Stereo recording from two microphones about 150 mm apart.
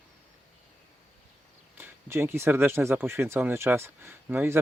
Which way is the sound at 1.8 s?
15° right (ahead or behind).